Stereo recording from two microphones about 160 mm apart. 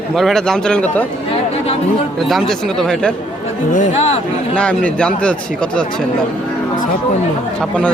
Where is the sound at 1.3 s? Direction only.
40° left (ahead or behind).